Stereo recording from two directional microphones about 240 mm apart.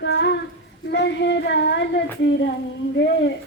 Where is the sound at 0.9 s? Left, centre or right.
Left.